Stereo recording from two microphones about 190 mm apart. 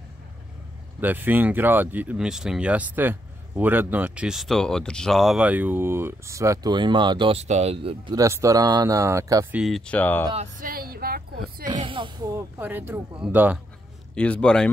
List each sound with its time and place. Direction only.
1.0 s speech: 10° right (ahead or behind); by 8.2 s 30° right (ahead or behind)
8.2 s speech: 15° right (ahead or behind)
9.6 s speech: centre (ahead or behind)
10.2 s speech: 30° right (ahead or behind)
10.6 s a sound: 50° right (ahead or behind)
11.6 s speech: 25° right (ahead or behind); by 13.6 s 10° right (ahead or behind)
14.1 s a man's voice: 5° left (ahead or behind)